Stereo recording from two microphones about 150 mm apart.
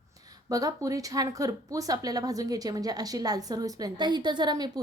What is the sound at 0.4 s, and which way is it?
A woman's voice, 25° right (ahead or behind).